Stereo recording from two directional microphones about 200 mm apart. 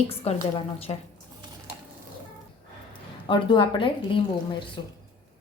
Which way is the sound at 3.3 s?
25° left (ahead or behind).